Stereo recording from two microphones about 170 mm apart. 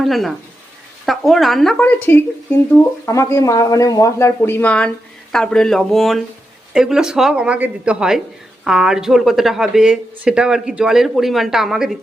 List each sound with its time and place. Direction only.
0.0 s speech: centre (ahead or behind)